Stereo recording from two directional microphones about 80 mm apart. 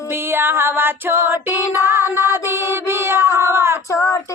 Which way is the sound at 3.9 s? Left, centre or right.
Left.